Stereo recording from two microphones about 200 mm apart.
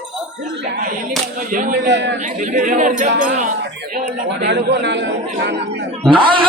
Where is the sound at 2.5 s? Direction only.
40° right (ahead or behind).